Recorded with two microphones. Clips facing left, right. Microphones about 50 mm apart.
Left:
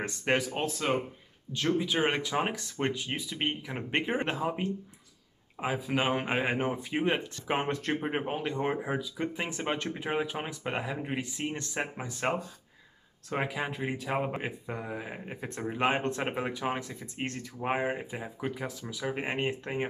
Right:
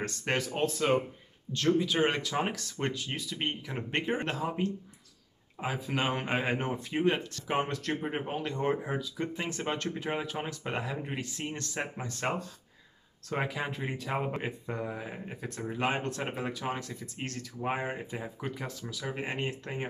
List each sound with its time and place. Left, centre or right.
0.0 s speech: centre
1.5 s speech: centre
18.9 s speech: left